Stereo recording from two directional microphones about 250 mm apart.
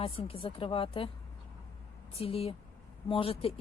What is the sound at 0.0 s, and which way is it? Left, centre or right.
Speech, left.